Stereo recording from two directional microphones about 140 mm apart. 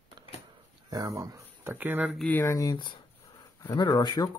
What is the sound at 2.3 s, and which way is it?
Speech, 15° left (ahead or behind).